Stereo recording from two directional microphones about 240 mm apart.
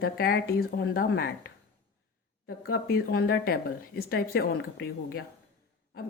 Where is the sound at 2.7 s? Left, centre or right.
Left.